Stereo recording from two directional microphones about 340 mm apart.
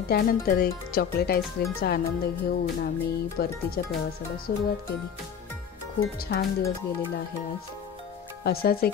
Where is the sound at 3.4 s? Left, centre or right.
Left.